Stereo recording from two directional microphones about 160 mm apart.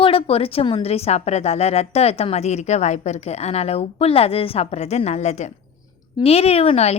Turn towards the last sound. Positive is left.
turn(degrees=40)  # may be behind; listen again after turning